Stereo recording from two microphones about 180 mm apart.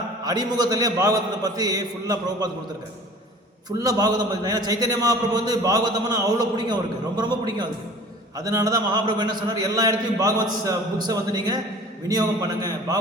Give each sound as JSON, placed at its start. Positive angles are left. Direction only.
{"t": 0.3, "sound": "a man's voice", "side_deg": -20}
{"t": 3.8, "sound": "a man's voice", "side_deg": -20}